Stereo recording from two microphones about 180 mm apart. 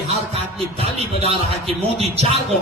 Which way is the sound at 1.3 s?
30° right (ahead or behind).